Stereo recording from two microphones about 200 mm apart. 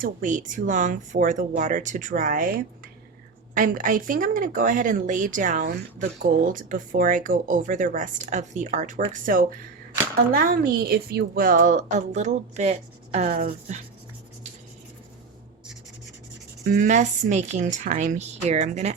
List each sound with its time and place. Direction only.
0.0 s speech: 40° right (ahead or behind)
3.5 s speech: 40° right (ahead or behind)
16.6 s speech: 40° right (ahead or behind)